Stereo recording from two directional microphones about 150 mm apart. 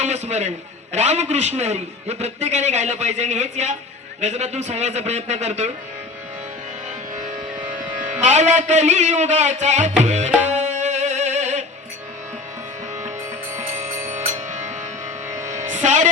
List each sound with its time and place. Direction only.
0.0 s a man's voice: 50° right (ahead or behind)
8.2 s a man's voice: 50° right (ahead or behind)
10.4 s music: 50° right (ahead or behind)
14.3 s music: 55° right (ahead or behind)
15.3 s music: 20° right (ahead or behind)
15.5 s music: 55° right (ahead or behind)